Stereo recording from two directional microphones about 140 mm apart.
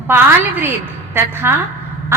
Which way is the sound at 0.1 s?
15° right (ahead or behind).